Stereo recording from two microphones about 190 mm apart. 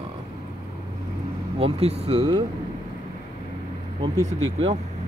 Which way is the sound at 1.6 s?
30° right (ahead or behind).